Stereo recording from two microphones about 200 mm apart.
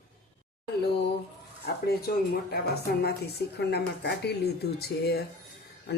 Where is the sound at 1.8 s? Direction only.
50° left (ahead or behind).